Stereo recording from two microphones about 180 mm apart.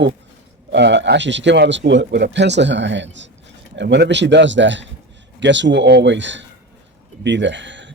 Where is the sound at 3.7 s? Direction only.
70° right (ahead or behind); by 7.9 s 90° right.